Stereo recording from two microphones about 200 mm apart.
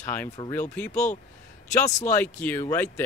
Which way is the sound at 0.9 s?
35° left (ahead or behind).